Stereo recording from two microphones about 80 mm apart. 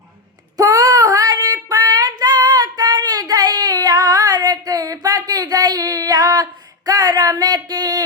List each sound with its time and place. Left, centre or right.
0.5 s female singing: right